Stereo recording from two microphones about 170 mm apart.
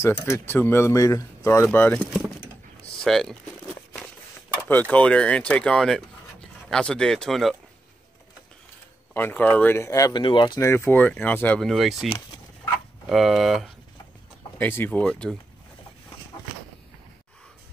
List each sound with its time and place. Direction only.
0.0 s speech: 15° left (ahead or behind)
4.6 s speech: 10° left (ahead or behind)
9.1 s speech: 10° left (ahead or behind)
13.1 s speech: centre (ahead or behind)
14.6 s speech: 10° left (ahead or behind)